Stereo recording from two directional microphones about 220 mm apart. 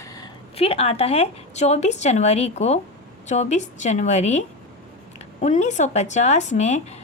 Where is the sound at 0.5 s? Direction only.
25° left (ahead or behind).